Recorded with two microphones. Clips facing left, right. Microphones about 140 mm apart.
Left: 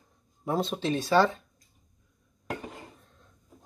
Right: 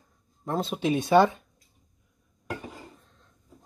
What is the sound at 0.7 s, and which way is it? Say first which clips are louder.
Speech: right 4 dB; 15° right (ahead or behind).